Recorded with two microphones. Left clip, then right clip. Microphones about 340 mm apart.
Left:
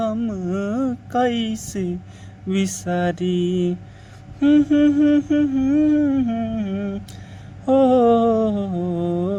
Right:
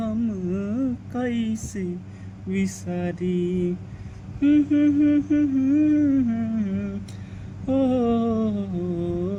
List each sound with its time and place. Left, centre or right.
0.0 s a sound: centre
2.5 s mantra: left
6.1 s humming: centre
7.7 s mantra: centre